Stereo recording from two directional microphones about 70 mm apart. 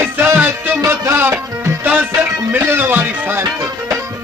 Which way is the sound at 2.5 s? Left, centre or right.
Right.